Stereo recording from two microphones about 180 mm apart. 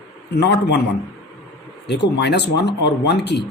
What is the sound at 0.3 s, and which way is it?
Speech, 70° left (ahead or behind).